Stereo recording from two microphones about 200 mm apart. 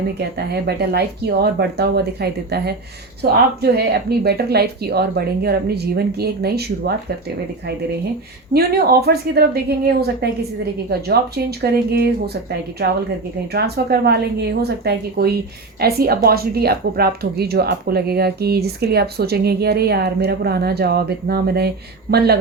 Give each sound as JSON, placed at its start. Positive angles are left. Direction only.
{"t": 0.2, "sound": "a woman's voice", "side_deg": -55}
{"t": 8.5, "sound": "a woman's voice", "side_deg": -50}
{"t": 11.6, "sound": "a woman's voice", "side_deg": -50}